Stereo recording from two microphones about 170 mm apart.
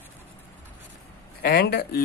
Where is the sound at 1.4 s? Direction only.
65° left (ahead or behind).